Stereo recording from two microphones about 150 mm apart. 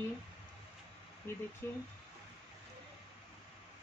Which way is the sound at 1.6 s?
15° left (ahead or behind).